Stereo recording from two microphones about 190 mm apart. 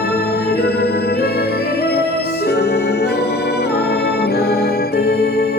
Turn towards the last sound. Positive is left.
turn(degrees=55)  # may be behind; listen again after turning